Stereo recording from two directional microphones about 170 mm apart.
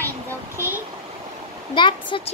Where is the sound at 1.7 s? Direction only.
30° left (ahead or behind).